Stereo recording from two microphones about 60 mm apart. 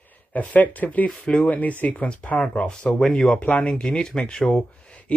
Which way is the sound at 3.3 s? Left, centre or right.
Left.